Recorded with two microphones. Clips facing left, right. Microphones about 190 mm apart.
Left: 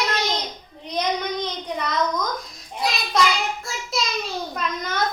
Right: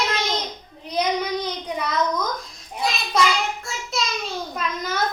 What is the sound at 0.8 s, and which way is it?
A child's voice, 5° right (ahead or behind).